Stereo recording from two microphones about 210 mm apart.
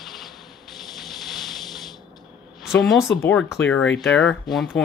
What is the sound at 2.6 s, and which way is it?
Speech, centre (ahead or behind).